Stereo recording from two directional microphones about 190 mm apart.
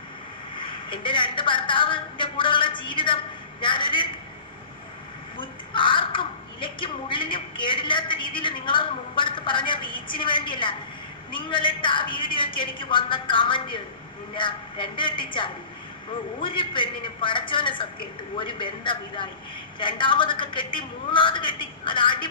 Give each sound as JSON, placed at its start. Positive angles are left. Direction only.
{"t": 0.5, "sound": "a woman's voice", "side_deg": 25}
{"t": 5.4, "sound": "a woman's voice", "side_deg": 25}